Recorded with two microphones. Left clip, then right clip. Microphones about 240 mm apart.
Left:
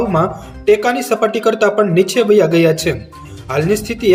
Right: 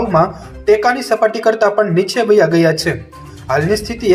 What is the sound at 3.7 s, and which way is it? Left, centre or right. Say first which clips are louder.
Speech: right 1 dB; centre.